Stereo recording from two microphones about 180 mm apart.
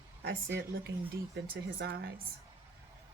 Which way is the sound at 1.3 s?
65° right (ahead or behind).